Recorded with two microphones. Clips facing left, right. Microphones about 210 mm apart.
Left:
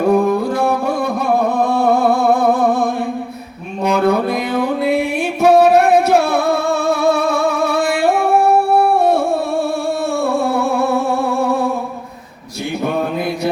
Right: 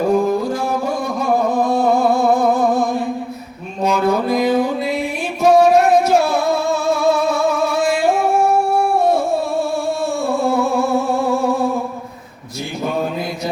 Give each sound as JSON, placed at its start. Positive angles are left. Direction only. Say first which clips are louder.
{"t": 0.1, "sound": "music", "louder": "left 2 dB", "side_deg": 60}
{"t": 3.8, "sound": "music", "louder": "left 2 dB", "side_deg": 60}